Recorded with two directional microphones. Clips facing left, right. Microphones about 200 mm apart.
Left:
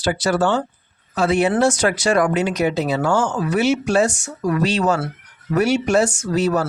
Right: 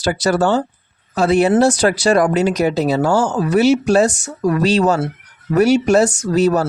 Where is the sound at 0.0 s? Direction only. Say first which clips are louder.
Right 3 dB; 40° right (ahead or behind).